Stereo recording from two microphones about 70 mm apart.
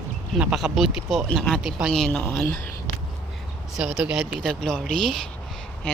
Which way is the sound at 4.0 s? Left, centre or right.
Centre.